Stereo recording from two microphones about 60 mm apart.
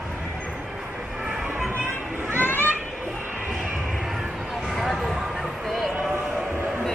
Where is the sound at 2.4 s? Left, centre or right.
Left.